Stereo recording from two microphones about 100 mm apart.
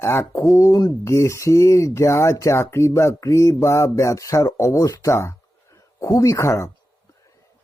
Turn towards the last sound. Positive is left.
turn(degrees=30)  # may be behind; listen again after turning